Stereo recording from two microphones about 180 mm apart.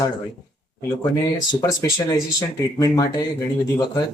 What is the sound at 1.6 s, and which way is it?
Speech, 20° left (ahead or behind).